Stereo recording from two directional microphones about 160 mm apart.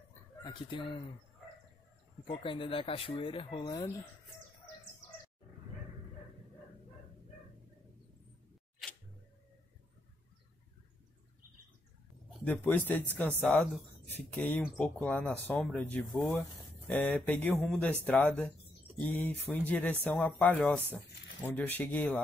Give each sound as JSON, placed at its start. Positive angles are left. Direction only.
{"t": 0.4, "sound": "speech", "side_deg": 30}
{"t": 2.2, "sound": "speech", "side_deg": 35}
{"t": 12.4, "sound": "speech", "side_deg": 10}